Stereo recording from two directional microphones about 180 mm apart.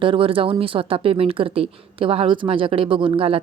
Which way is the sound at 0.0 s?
30° right (ahead or behind).